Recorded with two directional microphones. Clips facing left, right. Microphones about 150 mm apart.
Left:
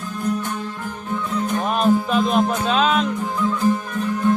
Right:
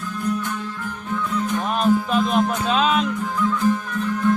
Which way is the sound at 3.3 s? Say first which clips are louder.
Left 1 dB; 25° left (ahead or behind).